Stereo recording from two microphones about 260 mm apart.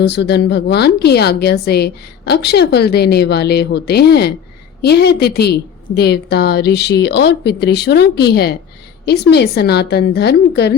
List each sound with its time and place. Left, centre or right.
0.0 s a woman's voice: left